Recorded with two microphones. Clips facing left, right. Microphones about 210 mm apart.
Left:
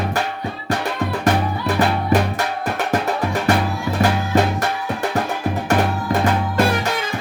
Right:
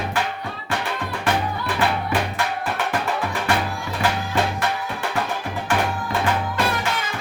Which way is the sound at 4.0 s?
45° left (ahead or behind).